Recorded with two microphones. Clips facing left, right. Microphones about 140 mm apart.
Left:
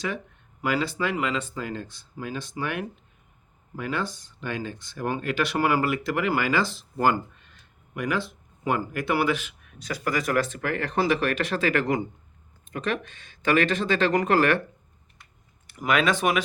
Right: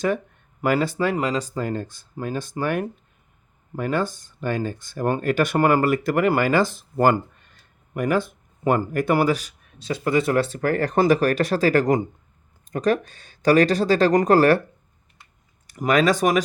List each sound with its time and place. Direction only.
0.6 s speech: 50° right (ahead or behind)
15.6 s speech: 40° right (ahead or behind)